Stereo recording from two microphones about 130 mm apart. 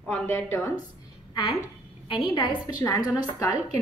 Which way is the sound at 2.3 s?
35° left (ahead or behind).